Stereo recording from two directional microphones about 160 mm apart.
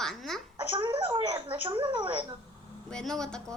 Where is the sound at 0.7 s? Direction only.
25° right (ahead or behind).